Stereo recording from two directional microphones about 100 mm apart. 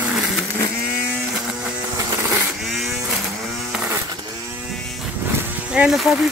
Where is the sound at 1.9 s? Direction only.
30° right (ahead or behind).